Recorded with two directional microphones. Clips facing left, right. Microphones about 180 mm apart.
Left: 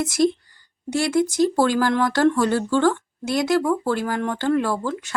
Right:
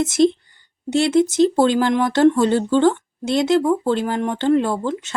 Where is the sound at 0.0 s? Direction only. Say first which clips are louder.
Right 4 dB; 25° right (ahead or behind).